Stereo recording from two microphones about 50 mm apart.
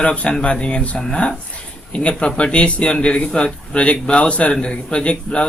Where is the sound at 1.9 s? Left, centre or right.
Left.